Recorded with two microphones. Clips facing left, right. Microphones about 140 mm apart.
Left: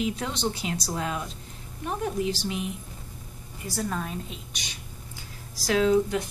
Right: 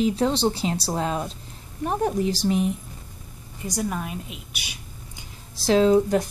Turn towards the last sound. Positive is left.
turn(degrees=-35)  # may be behind; listen again after turning